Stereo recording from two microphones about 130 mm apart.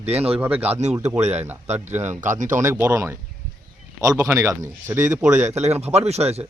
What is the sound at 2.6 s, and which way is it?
A man's voice, 20° right (ahead or behind).